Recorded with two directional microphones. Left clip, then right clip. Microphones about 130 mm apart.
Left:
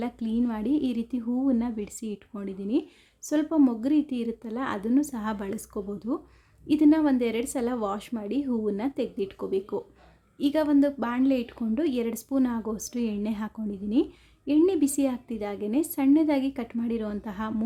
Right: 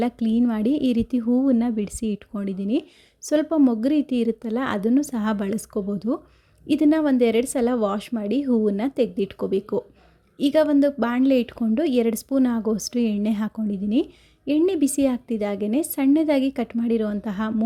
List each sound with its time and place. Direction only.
0.0 s a woman's voice: 40° right (ahead or behind)